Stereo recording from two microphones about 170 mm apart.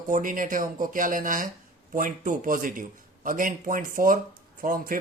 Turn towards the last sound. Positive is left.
turn(degrees=-55)  # may be behind; listen again after turning